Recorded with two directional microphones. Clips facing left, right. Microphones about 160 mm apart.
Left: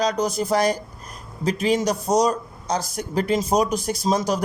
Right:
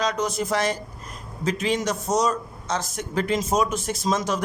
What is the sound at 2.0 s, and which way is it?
A man's voice, 35° left (ahead or behind).